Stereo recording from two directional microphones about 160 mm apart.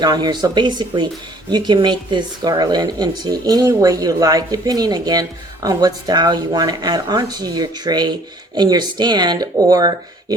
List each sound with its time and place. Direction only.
0.0 s speech: 25° right (ahead or behind)